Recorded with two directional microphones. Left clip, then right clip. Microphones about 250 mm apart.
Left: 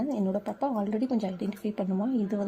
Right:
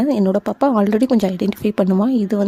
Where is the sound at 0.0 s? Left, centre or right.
Right.